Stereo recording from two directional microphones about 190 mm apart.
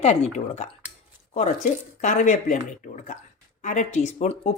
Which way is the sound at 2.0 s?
40° left (ahead or behind).